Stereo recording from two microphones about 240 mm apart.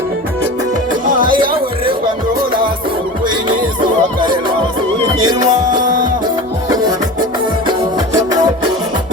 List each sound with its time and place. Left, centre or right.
1.2 s music: centre
4.2 s music: centre
5.8 s music: right
6.7 s music: centre